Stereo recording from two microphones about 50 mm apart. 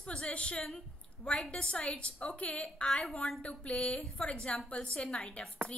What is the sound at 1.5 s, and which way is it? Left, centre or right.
A woman's voice, left.